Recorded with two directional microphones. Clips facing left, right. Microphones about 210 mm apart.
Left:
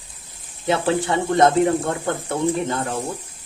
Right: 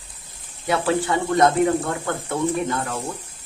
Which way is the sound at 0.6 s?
25° left (ahead or behind).